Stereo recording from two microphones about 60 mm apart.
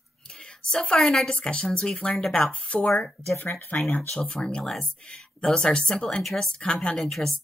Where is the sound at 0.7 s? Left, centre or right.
Centre.